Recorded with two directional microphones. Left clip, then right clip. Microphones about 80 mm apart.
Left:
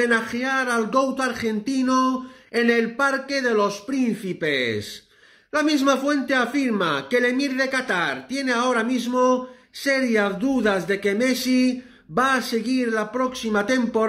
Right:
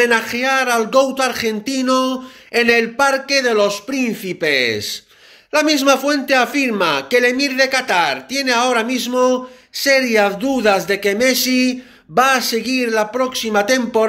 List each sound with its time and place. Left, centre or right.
0.0 s a man's voice: left